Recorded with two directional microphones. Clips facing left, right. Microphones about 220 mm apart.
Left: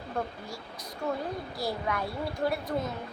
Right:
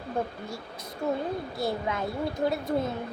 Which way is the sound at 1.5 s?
25° right (ahead or behind).